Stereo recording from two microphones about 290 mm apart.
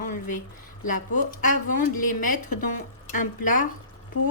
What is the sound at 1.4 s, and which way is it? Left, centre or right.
Speech, left.